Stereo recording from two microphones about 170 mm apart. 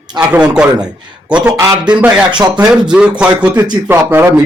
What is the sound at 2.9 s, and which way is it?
Speech, 5° right (ahead or behind).